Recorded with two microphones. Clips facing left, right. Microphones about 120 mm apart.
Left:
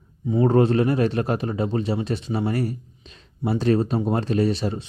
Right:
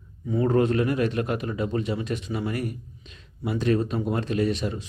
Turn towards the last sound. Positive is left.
turn(degrees=30)  # may be behind; listen again after turning